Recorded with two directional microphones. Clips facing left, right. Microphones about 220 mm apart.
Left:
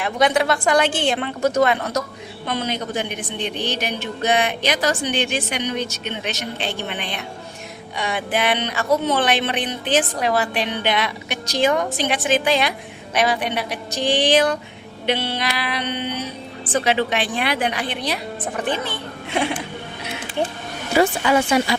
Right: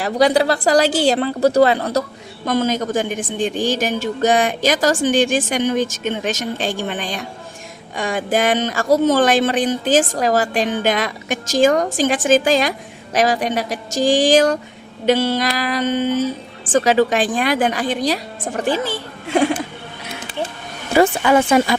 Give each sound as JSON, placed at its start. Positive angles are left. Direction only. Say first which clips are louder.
{"t": 0.0, "sound": "a woman's voice", "louder": "right 4 dB", "side_deg": -35}
{"t": 21.0, "sound": "a woman's voice", "louder": "right 4 dB", "side_deg": -50}